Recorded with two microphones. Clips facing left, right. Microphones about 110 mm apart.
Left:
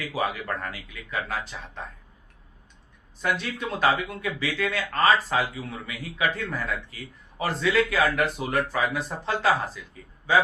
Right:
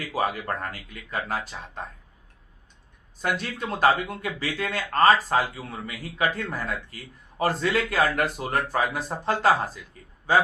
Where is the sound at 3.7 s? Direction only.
40° right (ahead or behind).